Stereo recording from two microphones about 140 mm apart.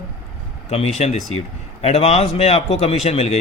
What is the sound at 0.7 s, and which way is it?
A man's voice, 50° left (ahead or behind).